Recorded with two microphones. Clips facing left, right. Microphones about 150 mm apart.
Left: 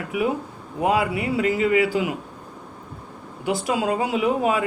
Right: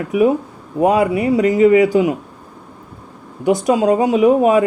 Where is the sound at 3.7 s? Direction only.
40° right (ahead or behind).